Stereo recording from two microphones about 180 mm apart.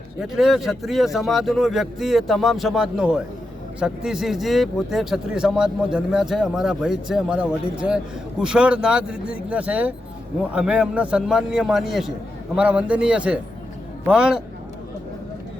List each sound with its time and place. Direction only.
0.2 s speech: centre (ahead or behind)